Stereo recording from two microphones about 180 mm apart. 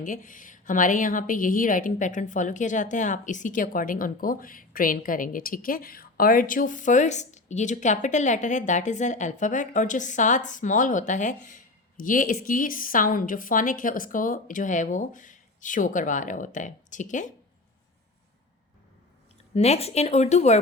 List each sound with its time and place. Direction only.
0.0 s a woman's voice: 45° left (ahead or behind)
19.5 s speech: 35° left (ahead or behind)